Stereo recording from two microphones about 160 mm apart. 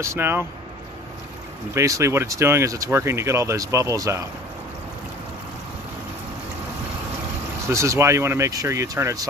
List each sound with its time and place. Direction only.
0.0 s speech: 15° right (ahead or behind)
1.8 s speech: 20° right (ahead or behind)
7.7 s speech: 20° right (ahead or behind)